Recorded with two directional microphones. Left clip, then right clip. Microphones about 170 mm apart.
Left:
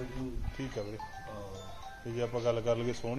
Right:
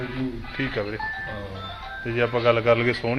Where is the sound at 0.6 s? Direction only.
10° left (ahead or behind).